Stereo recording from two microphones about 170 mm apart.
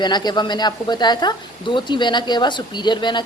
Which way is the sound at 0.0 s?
25° left (ahead or behind).